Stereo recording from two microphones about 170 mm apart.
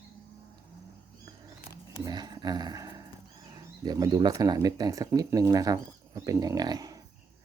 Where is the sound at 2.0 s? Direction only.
25° right (ahead or behind).